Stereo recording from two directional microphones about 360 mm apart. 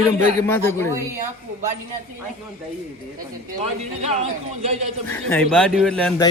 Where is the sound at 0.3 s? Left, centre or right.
Centre.